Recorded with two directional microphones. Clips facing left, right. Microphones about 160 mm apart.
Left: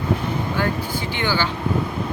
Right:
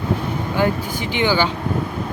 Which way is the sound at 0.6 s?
15° right (ahead or behind).